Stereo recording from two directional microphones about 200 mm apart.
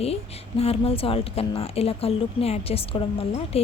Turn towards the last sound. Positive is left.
turn(degrees=30)  # may be behind; listen again after turning